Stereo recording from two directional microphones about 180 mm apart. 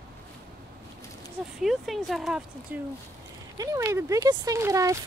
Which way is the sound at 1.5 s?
Centre (ahead or behind).